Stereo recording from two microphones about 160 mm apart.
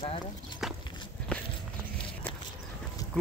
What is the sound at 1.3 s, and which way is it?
Walk, 5° left (ahead or behind).